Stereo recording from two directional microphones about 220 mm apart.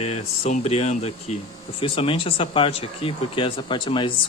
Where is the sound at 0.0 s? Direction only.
30° left (ahead or behind).